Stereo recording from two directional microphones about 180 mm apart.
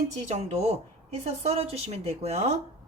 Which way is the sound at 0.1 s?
40° right (ahead or behind).